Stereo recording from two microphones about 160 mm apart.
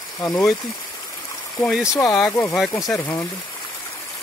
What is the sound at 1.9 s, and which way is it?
Speech, 20° left (ahead or behind).